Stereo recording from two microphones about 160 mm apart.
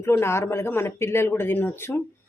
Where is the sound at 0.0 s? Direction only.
15° left (ahead or behind).